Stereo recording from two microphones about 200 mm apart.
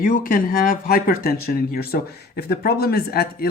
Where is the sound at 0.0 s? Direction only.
45° left (ahead or behind).